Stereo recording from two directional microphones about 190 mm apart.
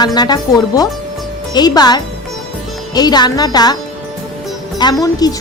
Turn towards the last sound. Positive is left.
turn(degrees=20)  # may be behind; listen again after turning